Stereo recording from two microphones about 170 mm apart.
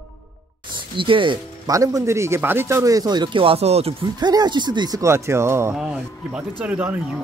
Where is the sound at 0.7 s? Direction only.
30° right (ahead or behind).